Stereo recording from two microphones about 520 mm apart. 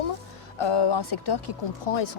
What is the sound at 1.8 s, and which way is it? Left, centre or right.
Speech, left.